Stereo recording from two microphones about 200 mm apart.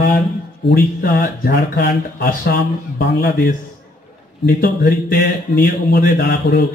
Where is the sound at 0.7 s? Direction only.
50° left (ahead or behind).